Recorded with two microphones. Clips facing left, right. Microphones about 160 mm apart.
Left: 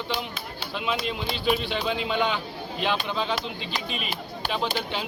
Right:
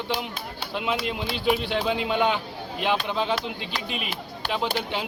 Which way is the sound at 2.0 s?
15° right (ahead or behind).